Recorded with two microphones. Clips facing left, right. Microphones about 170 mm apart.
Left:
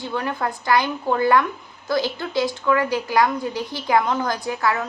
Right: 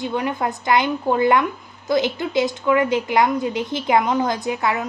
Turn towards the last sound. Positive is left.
turn(degrees=-20)  # may be behind; listen again after turning